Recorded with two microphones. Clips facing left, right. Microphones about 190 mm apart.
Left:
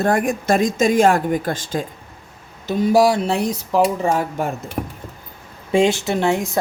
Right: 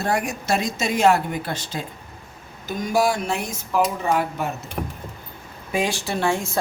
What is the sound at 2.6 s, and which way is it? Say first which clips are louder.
Speech: left 6 dB; 30° left (ahead or behind).